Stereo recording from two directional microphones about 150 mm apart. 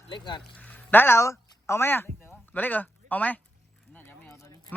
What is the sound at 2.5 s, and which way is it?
Speech, 10° left (ahead or behind).